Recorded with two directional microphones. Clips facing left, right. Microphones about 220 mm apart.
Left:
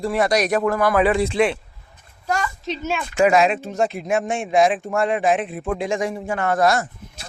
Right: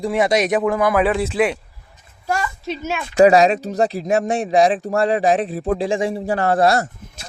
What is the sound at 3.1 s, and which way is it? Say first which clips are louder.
Speech: right 5 dB; 35° right (ahead or behind).